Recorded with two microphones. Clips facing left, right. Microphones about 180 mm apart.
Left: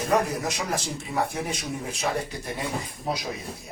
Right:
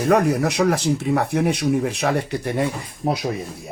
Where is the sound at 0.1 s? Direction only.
65° right (ahead or behind).